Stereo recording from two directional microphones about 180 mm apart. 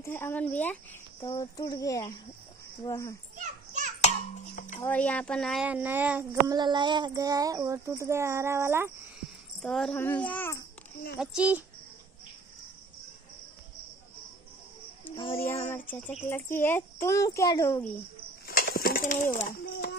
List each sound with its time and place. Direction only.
0.0 s speech: 10° left (ahead or behind)
3.3 s children playing: 40° right (ahead or behind)
4.6 s speech: 45° left (ahead or behind)
4.8 s speech: 5° left (ahead or behind); by 6.5 s 10° right (ahead or behind)
6.5 s speech: 25° right (ahead or behind)
9.6 s speech: centre (ahead or behind)
11.1 s speech: 5° right (ahead or behind)
15.3 s speech: 15° left (ahead or behind)
18.5 s a sound: 55° left (ahead or behind)